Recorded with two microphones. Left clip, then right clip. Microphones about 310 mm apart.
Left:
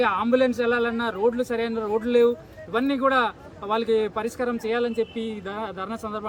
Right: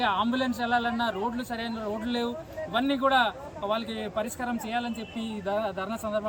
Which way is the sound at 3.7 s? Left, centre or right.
Centre.